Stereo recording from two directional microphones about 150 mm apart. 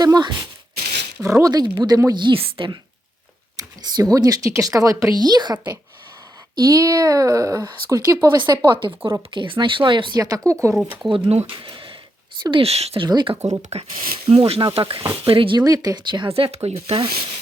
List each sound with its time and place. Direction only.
0.0 s speech: 25° right (ahead or behind)
3.9 s speech: 25° right (ahead or behind)
10.8 s speech: 5° right (ahead or behind)
11.1 s speech: 40° right (ahead or behind)
13.1 s speech: 30° right (ahead or behind)
13.6 s speech: 45° right (ahead or behind)